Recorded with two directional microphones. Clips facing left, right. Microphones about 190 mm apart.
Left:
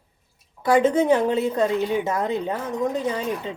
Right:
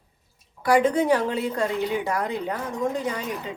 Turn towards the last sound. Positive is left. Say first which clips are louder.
# left 2 dB
turn(degrees=20)  # may be behind; listen again after turning